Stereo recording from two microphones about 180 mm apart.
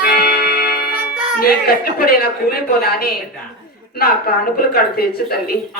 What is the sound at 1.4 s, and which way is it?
Speech, 55° left (ahead or behind).